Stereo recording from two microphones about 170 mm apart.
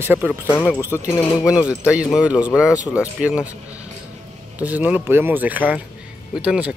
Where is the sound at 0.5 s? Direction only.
10° left (ahead or behind).